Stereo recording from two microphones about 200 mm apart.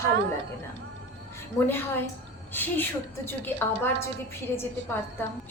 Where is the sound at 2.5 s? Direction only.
10° left (ahead or behind).